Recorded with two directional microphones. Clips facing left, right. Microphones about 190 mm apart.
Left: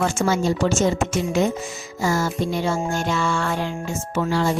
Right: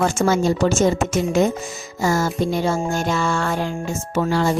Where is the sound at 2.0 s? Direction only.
45° right (ahead or behind).